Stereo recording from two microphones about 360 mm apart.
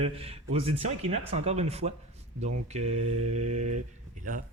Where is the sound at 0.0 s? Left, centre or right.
Centre.